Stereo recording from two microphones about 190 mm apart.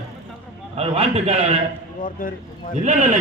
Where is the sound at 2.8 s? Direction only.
40° right (ahead or behind).